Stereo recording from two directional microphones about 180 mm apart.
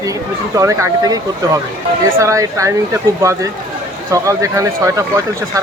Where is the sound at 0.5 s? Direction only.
15° right (ahead or behind).